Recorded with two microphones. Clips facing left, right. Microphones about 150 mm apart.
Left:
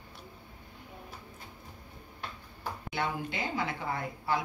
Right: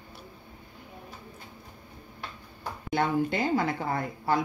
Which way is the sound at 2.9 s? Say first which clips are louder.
Right 9 dB; 45° right (ahead or behind).